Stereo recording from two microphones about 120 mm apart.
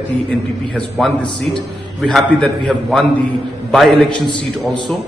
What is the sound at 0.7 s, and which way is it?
A man's voice, centre (ahead or behind).